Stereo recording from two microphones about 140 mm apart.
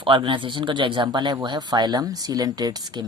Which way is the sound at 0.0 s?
35° right (ahead or behind).